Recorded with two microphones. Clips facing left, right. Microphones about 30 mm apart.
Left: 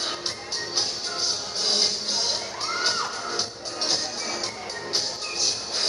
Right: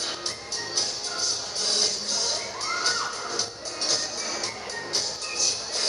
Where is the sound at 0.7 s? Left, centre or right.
Left.